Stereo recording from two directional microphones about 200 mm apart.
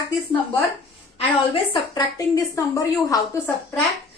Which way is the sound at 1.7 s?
20° left (ahead or behind).